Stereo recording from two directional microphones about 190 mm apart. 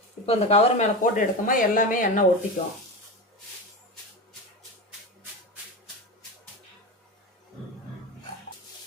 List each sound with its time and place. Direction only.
0.3 s speech: 30° left (ahead or behind)